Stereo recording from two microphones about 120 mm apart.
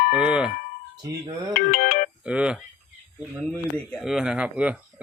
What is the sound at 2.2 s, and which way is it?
Speech, 10° right (ahead or behind).